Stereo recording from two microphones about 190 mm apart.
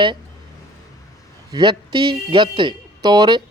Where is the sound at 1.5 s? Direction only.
25° right (ahead or behind).